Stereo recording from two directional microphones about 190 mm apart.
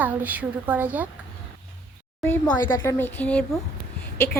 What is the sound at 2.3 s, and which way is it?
Speech, 15° left (ahead or behind).